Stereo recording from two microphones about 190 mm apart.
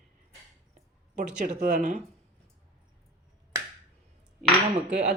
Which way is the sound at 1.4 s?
40° right (ahead or behind).